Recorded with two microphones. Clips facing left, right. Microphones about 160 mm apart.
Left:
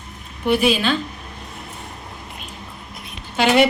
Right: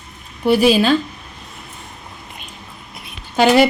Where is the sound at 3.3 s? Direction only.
40° right (ahead or behind).